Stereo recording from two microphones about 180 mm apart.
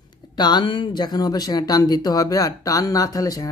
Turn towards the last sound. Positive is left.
turn(degrees=20)  # may be behind; listen again after turning